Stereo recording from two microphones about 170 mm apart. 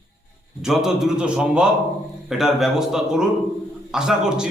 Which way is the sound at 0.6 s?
5° right (ahead or behind).